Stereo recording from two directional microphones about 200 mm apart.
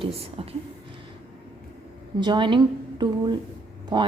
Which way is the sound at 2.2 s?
25° right (ahead or behind).